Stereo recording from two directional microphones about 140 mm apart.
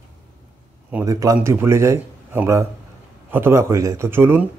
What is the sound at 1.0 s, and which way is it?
Speech, 25° right (ahead or behind).